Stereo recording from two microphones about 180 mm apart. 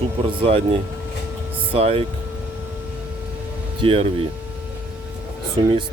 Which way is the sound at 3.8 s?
30° right (ahead or behind).